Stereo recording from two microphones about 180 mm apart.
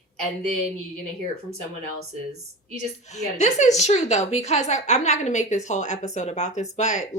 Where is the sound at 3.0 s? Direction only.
40° left (ahead or behind).